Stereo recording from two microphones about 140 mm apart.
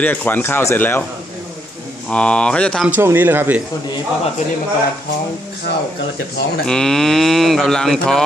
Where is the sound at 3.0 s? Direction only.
15° right (ahead or behind).